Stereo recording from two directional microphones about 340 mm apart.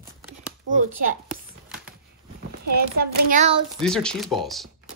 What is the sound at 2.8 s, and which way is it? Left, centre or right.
Child singing, right.